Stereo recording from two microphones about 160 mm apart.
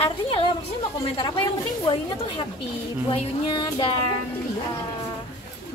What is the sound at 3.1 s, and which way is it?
Speech, 30° left (ahead or behind).